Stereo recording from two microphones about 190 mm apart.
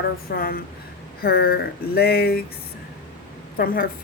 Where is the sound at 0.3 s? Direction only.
50° left (ahead or behind).